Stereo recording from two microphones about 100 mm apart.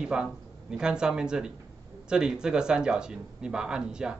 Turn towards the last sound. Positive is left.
turn(degrees=-10)  # may be behind; listen again after turning